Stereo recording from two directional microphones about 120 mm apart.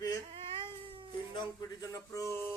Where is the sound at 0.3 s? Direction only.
50° right (ahead or behind).